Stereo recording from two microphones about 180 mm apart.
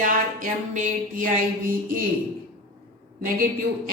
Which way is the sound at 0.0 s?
50° right (ahead or behind).